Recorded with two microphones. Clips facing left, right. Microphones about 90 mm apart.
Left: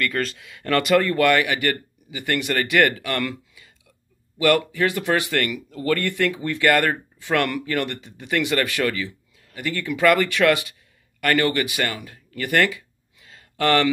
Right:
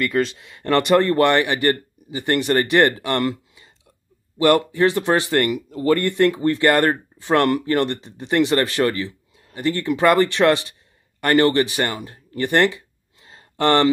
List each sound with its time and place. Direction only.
0.4 s a man's voice: 30° right (ahead or behind)